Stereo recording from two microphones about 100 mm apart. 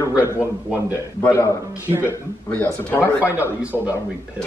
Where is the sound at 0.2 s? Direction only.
20° right (ahead or behind).